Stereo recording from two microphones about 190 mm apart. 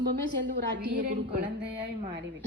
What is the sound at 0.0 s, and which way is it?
Speech, 65° right (ahead or behind).